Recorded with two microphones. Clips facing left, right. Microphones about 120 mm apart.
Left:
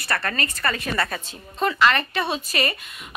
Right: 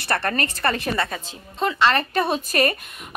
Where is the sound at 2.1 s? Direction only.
45° right (ahead or behind).